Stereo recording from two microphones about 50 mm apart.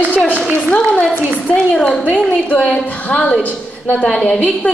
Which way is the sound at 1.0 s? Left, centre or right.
Centre.